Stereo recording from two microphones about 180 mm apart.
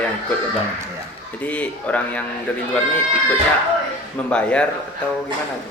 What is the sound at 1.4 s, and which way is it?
Speech, 10° left (ahead or behind).